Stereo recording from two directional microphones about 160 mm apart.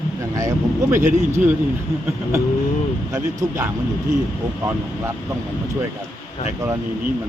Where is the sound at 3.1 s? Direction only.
20° right (ahead or behind).